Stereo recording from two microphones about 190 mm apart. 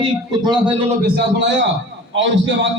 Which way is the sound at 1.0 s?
55° right (ahead or behind).